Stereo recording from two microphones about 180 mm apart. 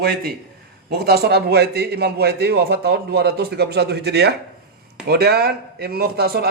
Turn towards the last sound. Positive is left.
turn(degrees=-60)  # may be behind; listen again after turning